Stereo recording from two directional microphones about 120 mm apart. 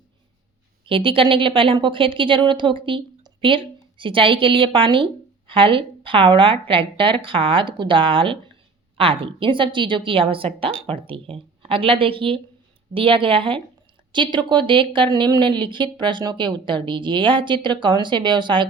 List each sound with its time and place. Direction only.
0.9 s a woman's voice: 45° right (ahead or behind)